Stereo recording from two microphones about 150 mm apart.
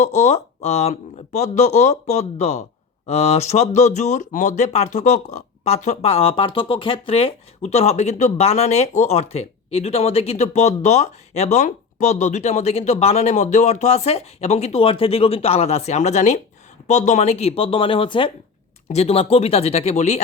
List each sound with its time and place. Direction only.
0.0 s speech: 50° left (ahead or behind)